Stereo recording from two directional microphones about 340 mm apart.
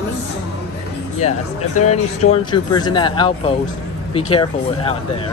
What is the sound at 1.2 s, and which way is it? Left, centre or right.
Speech, centre.